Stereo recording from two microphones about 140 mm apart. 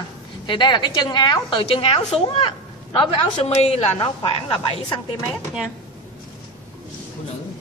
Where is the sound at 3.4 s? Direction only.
50° left (ahead or behind).